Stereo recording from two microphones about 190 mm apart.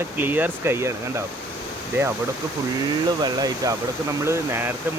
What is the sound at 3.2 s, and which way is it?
Speech, 20° right (ahead or behind).